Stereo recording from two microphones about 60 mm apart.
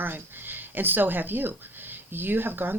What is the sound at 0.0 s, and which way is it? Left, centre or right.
Speech, right.